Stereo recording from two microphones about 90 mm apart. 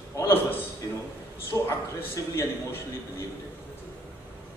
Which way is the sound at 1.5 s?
30° left (ahead or behind).